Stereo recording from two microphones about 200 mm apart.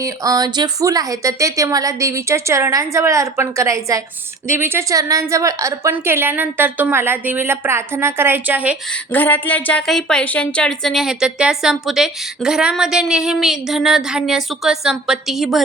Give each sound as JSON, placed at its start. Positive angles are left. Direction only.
{"t": 0.0, "sound": "speech", "side_deg": -20}
{"t": 9.1, "sound": "a woman's voice", "side_deg": 10}